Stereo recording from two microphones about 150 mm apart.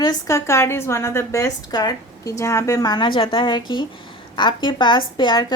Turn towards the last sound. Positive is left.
turn(degrees=30)  # may be behind; listen again after turning